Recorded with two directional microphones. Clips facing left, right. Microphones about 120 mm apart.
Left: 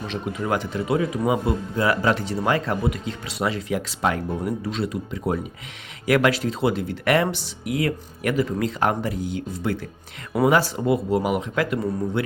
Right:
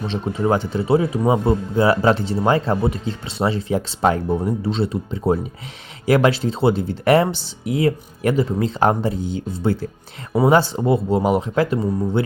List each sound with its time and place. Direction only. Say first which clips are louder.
0.1 s speech: right 5 dB; 30° right (ahead or behind)